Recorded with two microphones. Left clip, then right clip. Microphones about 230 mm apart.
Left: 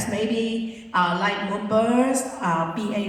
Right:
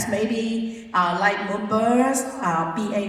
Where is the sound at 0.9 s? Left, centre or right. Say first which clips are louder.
Right 2 dB; right.